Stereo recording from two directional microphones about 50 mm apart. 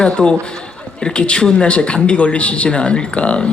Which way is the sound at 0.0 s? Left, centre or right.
Centre.